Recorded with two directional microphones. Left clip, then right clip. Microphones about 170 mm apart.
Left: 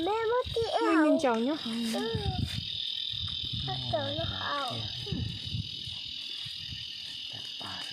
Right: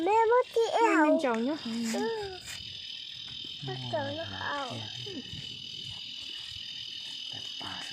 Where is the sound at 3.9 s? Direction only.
45° right (ahead or behind).